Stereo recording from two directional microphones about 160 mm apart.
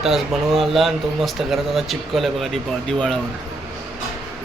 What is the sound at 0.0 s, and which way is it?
Speech, centre (ahead or behind).